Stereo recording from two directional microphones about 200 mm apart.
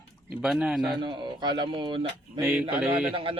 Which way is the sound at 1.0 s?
20° right (ahead or behind).